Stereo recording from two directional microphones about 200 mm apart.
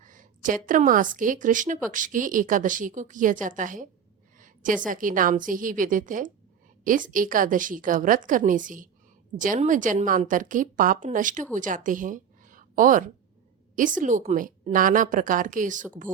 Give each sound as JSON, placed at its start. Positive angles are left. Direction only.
{"t": 0.0, "sound": "a woman's voice", "side_deg": -40}
{"t": 4.4, "sound": "a sound", "side_deg": -40}
{"t": 4.9, "sound": "a woman's voice", "side_deg": -40}